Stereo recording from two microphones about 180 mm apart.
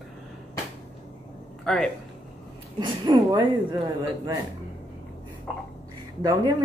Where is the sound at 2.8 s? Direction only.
25° right (ahead or behind).